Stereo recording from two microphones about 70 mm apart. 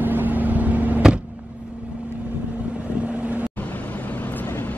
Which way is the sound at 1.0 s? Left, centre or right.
Centre.